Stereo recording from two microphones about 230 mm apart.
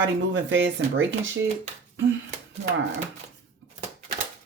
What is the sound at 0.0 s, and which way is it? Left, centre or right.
Speech, right.